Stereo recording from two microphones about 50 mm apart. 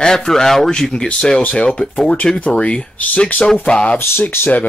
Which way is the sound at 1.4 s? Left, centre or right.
Left.